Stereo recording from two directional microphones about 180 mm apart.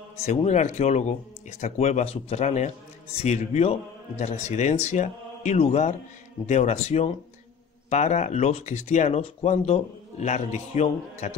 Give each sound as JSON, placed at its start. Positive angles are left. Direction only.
{"t": 0.2, "sound": "speech", "side_deg": 40}